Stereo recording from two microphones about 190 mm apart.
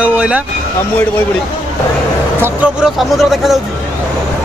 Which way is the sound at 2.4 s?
Centre (ahead or behind).